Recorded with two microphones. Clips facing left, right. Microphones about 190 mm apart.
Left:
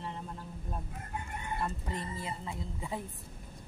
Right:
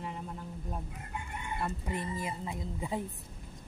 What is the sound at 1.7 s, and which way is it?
Speech, 10° right (ahead or behind).